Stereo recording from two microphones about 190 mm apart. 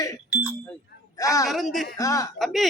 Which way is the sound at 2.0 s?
20° left (ahead or behind).